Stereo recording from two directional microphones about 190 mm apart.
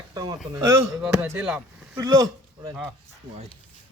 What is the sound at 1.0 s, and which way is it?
Speech, 5° right (ahead or behind).